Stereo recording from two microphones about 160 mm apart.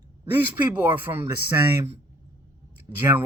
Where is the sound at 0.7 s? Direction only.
10° right (ahead or behind).